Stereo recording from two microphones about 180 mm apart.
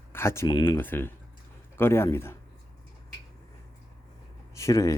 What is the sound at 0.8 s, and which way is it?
Speech, 10° left (ahead or behind).